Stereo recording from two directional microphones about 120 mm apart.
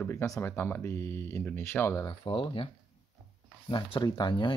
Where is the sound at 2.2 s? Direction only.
45° left (ahead or behind).